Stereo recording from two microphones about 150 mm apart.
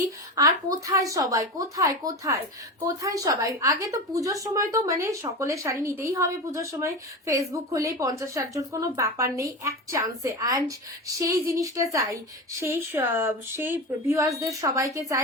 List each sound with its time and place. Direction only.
0.3 s a woman's voice: 25° right (ahead or behind)